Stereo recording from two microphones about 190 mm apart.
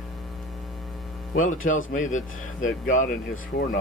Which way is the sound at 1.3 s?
45° left (ahead or behind).